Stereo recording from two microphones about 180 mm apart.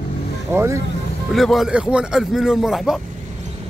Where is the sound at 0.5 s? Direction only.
15° right (ahead or behind).